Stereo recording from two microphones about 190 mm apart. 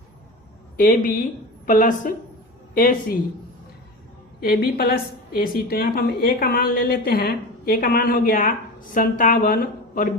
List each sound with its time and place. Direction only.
0.8 s a woman's voice: 45° left (ahead or behind)
4.4 s a woman's voice: 55° left (ahead or behind)